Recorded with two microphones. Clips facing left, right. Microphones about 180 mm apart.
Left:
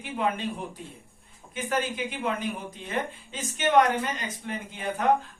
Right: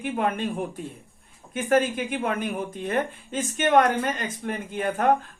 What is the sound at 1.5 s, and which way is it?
A woman's voice, 50° right (ahead or behind).